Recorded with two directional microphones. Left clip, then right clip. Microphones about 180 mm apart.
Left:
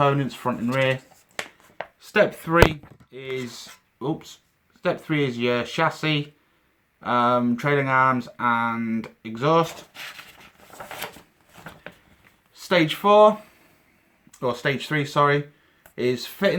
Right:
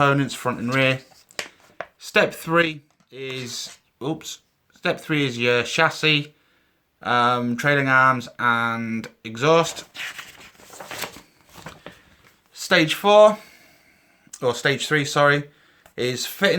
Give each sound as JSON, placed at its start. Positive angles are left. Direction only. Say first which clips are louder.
{"t": 0.0, "sound": "speech", "louder": "right 2 dB", "side_deg": -40}
{"t": 2.0, "sound": "speech", "louder": "right 1 dB", "side_deg": -40}
{"t": 9.9, "sound": "writing", "louder": "right 5 dB", "side_deg": -30}
{"t": 12.5, "sound": "speech", "louder": "right 2 dB", "side_deg": -35}